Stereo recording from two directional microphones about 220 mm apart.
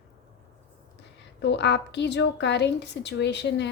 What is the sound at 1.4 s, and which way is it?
A woman's voice, 50° left (ahead or behind).